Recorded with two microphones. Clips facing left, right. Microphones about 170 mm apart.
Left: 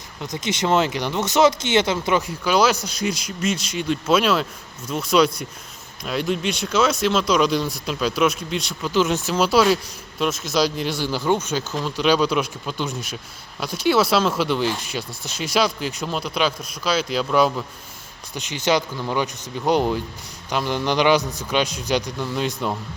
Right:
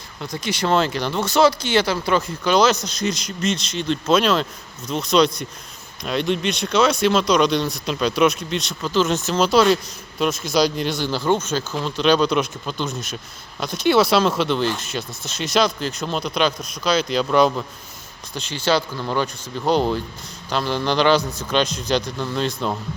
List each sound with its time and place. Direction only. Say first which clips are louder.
0.2 s speech: even; 20° left (ahead or behind)
2.4 s speech: right 3 dB; 5° left (ahead or behind)
11.7 s speech: right 2 dB; centre (ahead or behind)
18.3 s speech: even; 15° left (ahead or behind)